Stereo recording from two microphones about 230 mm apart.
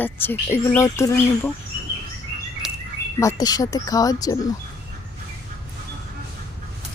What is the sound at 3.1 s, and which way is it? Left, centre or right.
Speech, centre.